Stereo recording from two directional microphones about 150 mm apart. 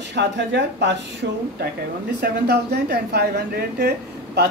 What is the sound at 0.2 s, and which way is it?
Speech, 90° right.